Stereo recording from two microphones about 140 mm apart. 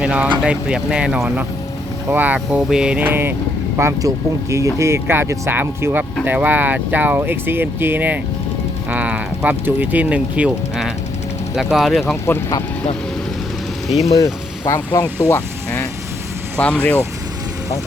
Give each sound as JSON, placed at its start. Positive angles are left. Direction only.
{"t": 0.0, "sound": "a sound", "side_deg": -10}
{"t": 0.4, "sound": "speech", "side_deg": -5}
{"t": 12.2, "sound": "speech", "side_deg": 25}
{"t": 13.9, "sound": "speech", "side_deg": 50}
{"t": 14.8, "sound": "speech", "side_deg": 30}
{"t": 16.6, "sound": "speech", "side_deg": 10}